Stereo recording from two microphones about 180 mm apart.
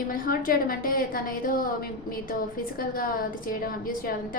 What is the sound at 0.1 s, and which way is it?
A woman's voice, 50° left (ahead or behind).